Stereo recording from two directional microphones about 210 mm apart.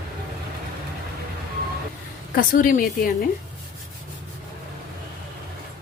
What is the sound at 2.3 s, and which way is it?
Speech, 40° left (ahead or behind).